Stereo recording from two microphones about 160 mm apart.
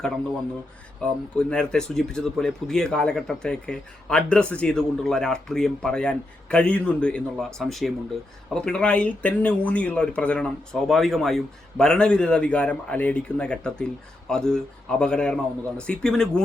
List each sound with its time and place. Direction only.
1.0 s speech: 5° left (ahead or behind)